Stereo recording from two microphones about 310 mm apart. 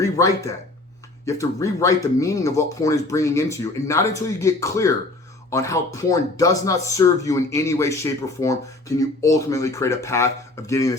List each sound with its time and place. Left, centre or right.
0.0 s speech: centre